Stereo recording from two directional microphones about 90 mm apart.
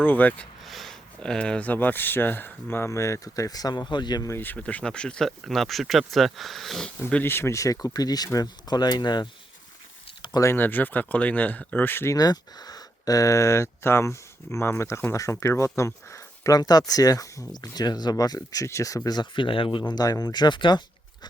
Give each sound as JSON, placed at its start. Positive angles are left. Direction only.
{"t": 0.0, "sound": "speech", "side_deg": 20}
{"t": 0.6, "sound": "speech", "side_deg": 0}
{"t": 4.3, "sound": "speech", "side_deg": 25}
{"t": 4.5, "sound": "speech", "side_deg": 15}
{"t": 7.1, "sound": "speech", "side_deg": 20}
{"t": 10.5, "sound": "speech", "side_deg": 20}
{"t": 12.1, "sound": "speech", "side_deg": 45}
{"t": 19.3, "sound": "speech", "side_deg": 75}
{"t": 19.8, "sound": "speech", "side_deg": 45}